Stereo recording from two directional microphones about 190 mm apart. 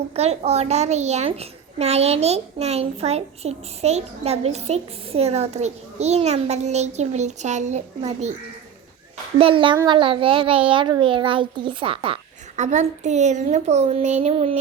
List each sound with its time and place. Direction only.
0.2 s a child's voice: 35° right (ahead or behind)
9.4 s a child's voice: 25° right (ahead or behind)